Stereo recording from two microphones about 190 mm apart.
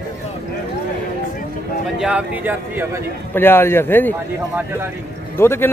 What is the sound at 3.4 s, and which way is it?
Speech, 10° left (ahead or behind).